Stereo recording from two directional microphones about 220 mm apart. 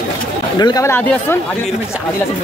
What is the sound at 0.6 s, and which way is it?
Speech, 15° left (ahead or behind).